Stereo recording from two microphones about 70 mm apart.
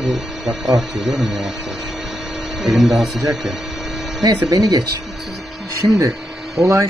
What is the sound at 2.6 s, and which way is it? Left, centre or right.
Speech, centre.